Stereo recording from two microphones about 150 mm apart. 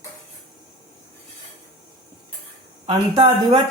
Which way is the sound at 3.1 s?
30° right (ahead or behind).